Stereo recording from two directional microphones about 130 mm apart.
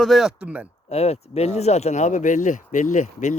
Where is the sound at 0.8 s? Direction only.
55° left (ahead or behind).